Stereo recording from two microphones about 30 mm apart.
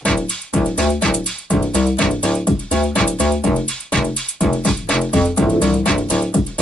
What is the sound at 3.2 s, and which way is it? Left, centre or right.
Music, left.